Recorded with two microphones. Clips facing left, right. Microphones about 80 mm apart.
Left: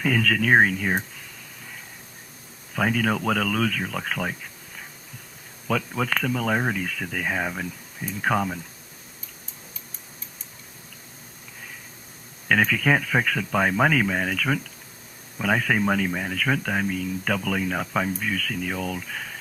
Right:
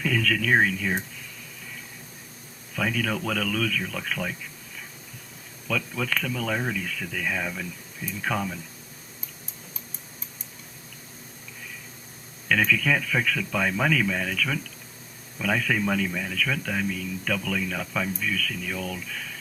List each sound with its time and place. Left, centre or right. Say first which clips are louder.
0.0 s speech: left 3 dB; left
2.7 s speech: left 4 dB; left
5.6 s speech: left 3 dB; left
12.5 s speech: left 2 dB; left